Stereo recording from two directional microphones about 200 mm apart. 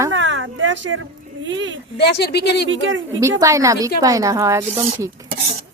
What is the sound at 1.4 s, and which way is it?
Speech, 70° right (ahead or behind).